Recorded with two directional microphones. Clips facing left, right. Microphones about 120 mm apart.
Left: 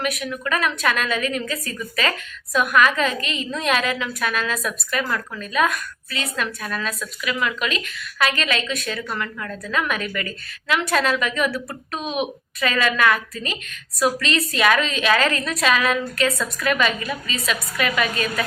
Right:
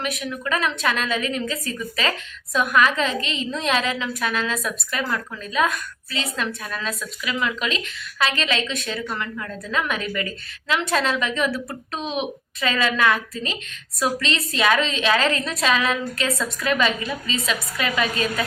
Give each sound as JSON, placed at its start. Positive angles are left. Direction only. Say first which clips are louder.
{"t": 0.0, "sound": "a woman's voice", "louder": "left 2 dB", "side_deg": -25}